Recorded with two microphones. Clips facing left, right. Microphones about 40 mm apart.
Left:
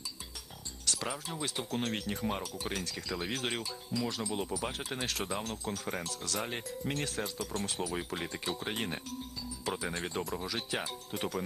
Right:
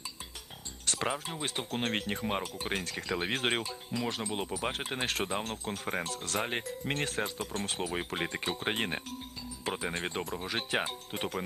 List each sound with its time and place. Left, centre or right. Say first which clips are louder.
0.9 s speech: right 4 dB; right